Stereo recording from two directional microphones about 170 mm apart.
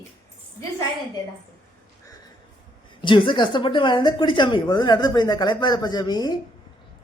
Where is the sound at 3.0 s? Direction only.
30° left (ahead or behind).